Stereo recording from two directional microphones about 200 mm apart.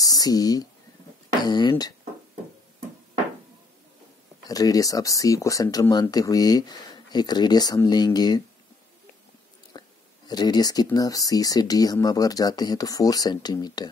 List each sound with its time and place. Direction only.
0.0 s speech: 20° left (ahead or behind)
4.5 s speech: 20° left (ahead or behind)
9.7 s speech: 20° left (ahead or behind)